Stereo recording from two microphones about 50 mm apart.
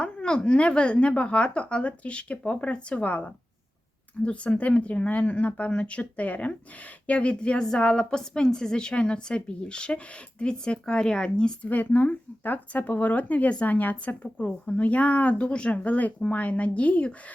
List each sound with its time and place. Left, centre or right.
0.0 s a woman's voice: centre
11.7 s speech: left
14.3 s a woman's voice: left